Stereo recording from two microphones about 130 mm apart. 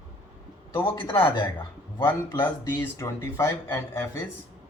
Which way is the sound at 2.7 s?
20° left (ahead or behind).